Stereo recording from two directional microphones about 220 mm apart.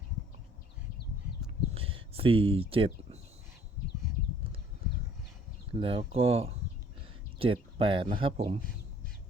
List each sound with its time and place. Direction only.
1.7 s speech: 25° right (ahead or behind)
5.7 s speech: 25° right (ahead or behind)